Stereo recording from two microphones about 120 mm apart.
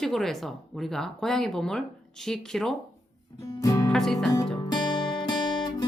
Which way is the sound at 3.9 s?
5° left (ahead or behind).